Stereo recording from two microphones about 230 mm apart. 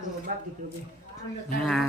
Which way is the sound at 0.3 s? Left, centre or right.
Right.